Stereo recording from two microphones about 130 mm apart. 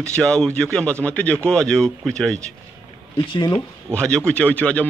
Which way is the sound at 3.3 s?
30° left (ahead or behind).